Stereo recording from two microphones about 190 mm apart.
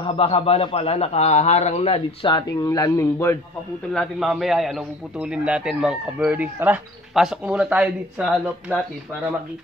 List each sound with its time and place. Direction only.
0.0 s a man's voice: 30° left (ahead or behind)
2.5 s a man's voice: 20° left (ahead or behind)
3.9 s a man's voice: centre (ahead or behind)